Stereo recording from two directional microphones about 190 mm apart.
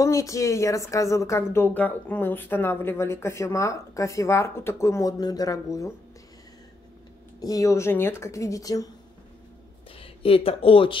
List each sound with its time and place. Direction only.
0.0 s a woman's voice: 15° left (ahead or behind)
7.3 s a woman's voice: 20° left (ahead or behind)
9.9 s speech: 30° left (ahead or behind)